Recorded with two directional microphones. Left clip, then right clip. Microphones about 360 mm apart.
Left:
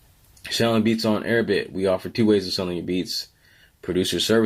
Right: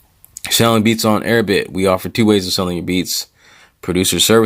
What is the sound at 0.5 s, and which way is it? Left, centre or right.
Speech, right.